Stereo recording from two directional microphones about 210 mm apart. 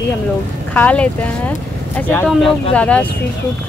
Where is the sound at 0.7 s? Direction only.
5° left (ahead or behind).